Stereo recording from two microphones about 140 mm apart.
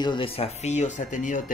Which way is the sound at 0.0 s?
35° left (ahead or behind).